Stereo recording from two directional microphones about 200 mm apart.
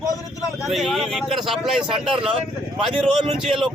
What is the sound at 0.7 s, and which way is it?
Speech, centre (ahead or behind).